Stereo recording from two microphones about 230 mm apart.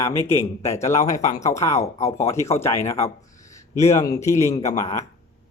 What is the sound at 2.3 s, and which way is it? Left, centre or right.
Speech, centre.